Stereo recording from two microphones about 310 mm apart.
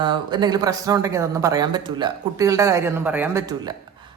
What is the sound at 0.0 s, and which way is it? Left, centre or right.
Speech, centre.